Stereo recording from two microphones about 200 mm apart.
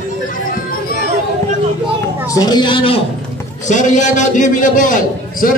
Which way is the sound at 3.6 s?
40° left (ahead or behind).